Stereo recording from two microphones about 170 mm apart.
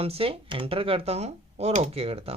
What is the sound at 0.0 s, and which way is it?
Speech, 35° right (ahead or behind).